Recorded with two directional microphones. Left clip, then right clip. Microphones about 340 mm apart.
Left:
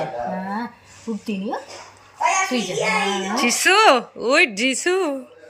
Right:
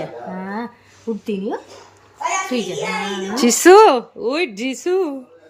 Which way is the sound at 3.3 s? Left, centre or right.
Centre.